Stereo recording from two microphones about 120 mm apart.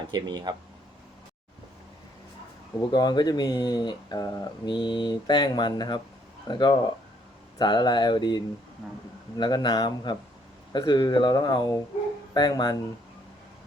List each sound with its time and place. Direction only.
0.1 s speech: 35° right (ahead or behind)
2.9 s speech: 35° left (ahead or behind)
9.4 s speech: 35° left (ahead or behind)